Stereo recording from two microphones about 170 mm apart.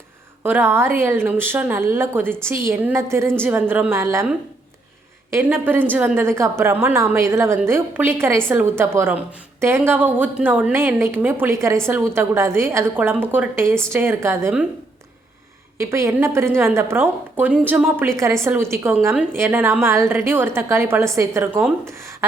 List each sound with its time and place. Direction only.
0.4 s a woman's voice: 10° right (ahead or behind)
5.3 s a woman's voice: 10° right (ahead or behind)
15.8 s a woman's voice: 15° right (ahead or behind)